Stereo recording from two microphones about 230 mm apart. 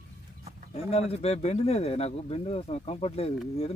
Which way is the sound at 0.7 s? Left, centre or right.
Left.